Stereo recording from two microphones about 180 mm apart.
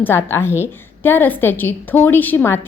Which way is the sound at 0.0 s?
15° left (ahead or behind).